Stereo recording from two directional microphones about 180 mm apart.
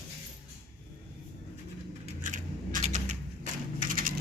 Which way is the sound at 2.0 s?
45° right (ahead or behind).